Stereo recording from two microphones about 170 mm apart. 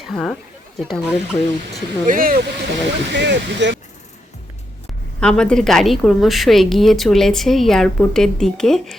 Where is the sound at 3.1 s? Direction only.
90° right.